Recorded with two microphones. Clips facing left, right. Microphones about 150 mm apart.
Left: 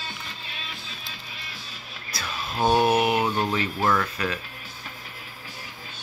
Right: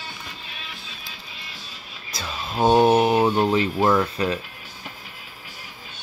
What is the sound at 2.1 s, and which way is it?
Speech, 25° right (ahead or behind).